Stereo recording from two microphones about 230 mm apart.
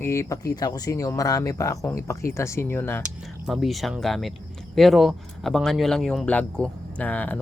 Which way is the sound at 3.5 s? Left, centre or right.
Centre.